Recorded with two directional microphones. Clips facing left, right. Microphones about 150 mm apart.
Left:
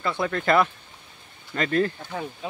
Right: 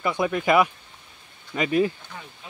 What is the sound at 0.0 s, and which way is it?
Speech, 15° right (ahead or behind).